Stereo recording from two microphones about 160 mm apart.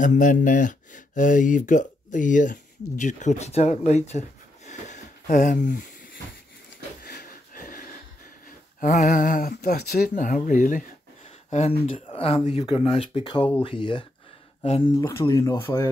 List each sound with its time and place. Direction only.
0.0 s speech: 55° left (ahead or behind)
4.6 s a sound: 50° left (ahead or behind)
7.0 s wheeze: 75° left (ahead or behind); by 7.9 s 60° left (ahead or behind)
8.5 s speech: 55° left (ahead or behind)
12.1 s a sound: 35° left (ahead or behind)
12.6 s speech: 35° left (ahead or behind)
15.0 s speech: 20° left (ahead or behind)